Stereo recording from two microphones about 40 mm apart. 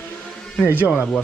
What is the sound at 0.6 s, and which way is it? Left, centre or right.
Speech, left.